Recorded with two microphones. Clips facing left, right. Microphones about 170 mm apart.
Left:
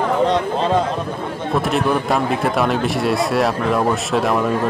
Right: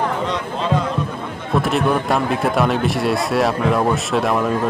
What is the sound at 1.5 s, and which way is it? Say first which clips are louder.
A man's voice: right 1 dB; centre (ahead or behind).